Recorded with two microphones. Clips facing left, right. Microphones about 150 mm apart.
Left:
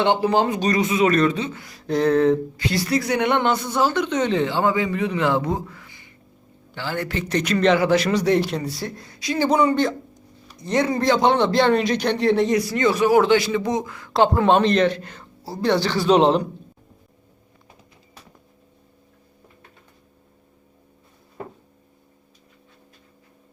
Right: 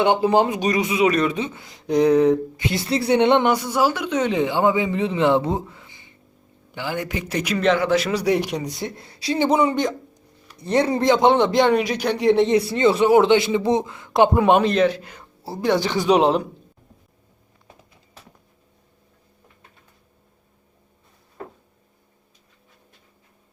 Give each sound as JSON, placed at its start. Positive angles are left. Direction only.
{"t": 0.0, "sound": "a man's voice", "side_deg": -20}
{"t": 3.4, "sound": "a man's voice", "side_deg": -10}
{"t": 10.6, "sound": "a man's voice", "side_deg": -30}